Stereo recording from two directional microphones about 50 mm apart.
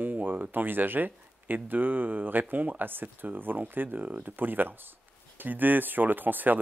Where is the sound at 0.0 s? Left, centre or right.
Right.